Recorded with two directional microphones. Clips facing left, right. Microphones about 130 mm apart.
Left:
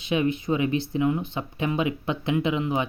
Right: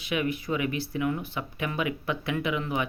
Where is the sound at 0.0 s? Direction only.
25° left (ahead or behind).